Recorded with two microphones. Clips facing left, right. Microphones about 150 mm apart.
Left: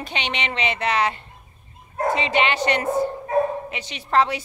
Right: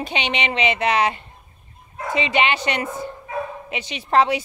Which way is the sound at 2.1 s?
15° right (ahead or behind).